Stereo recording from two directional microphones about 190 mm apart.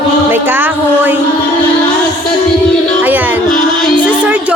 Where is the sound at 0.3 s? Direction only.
10° right (ahead or behind).